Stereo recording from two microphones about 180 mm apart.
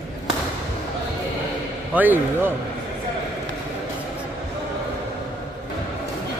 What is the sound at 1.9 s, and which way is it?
Speech, 10° right (ahead or behind).